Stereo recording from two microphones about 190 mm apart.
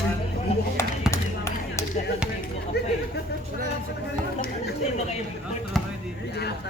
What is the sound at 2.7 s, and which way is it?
Chatter, 60° left (ahead or behind).